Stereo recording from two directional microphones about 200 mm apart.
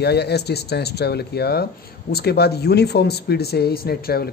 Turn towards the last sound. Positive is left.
turn(degrees=50)  # may be behind; listen again after turning